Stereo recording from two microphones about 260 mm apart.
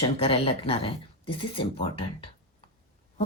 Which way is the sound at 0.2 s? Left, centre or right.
Left.